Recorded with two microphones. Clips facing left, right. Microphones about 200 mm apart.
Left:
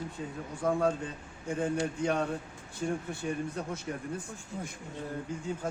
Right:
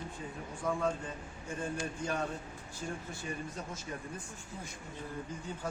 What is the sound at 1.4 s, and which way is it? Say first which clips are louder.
Speech: left 7 dB; 75° left (ahead or behind).